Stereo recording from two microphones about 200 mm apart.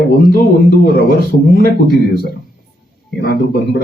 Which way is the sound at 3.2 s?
50° left (ahead or behind).